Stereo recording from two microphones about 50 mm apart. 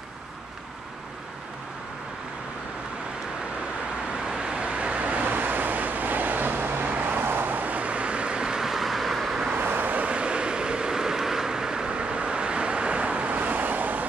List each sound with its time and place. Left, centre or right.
4.2 s vehicle: centre
9.6 s vehicle: right